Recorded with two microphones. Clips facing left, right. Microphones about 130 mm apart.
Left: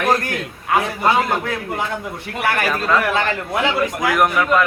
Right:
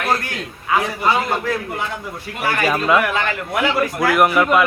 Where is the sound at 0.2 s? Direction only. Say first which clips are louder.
Left 3 dB; 50° left (ahead or behind).